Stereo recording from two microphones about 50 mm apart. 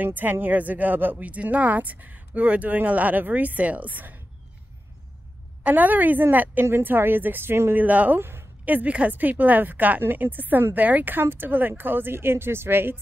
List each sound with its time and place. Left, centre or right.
0.0 s speech: right
5.6 s speech: right
6.6 s a woman's voice: right
7.7 s speech: right
8.2 s a sound: right
8.6 s a woman's voice: right